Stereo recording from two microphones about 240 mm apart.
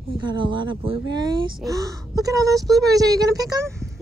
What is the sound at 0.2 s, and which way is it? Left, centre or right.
Speech, centre.